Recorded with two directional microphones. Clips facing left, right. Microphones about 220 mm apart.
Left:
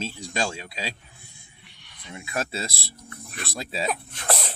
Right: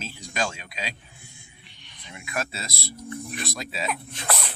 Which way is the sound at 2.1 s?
30° left (ahead or behind).